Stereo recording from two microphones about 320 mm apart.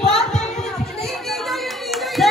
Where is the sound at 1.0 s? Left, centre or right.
Centre.